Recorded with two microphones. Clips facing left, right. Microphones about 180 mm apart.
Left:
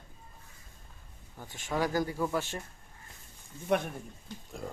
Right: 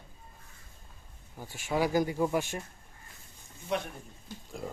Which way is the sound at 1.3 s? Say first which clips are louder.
Right 2 dB; 10° right (ahead or behind).